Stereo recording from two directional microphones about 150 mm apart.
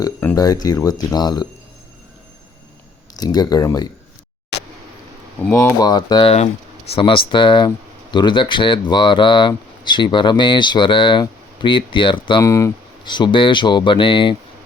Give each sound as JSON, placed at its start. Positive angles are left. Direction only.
{"t": 0.0, "sound": "speech", "side_deg": 20}
{"t": 3.2, "sound": "speech", "side_deg": 25}
{"t": 5.5, "sound": "speech", "side_deg": 20}
{"t": 12.4, "sound": "speech", "side_deg": 20}